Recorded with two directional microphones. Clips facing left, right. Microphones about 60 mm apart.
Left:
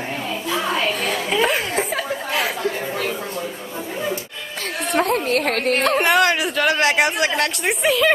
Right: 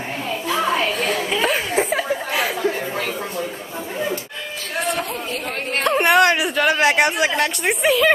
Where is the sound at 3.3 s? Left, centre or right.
Centre.